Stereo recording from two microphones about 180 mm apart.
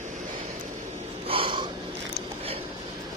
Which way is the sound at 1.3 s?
30° right (ahead or behind).